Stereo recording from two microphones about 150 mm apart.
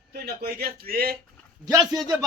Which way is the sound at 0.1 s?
90° right.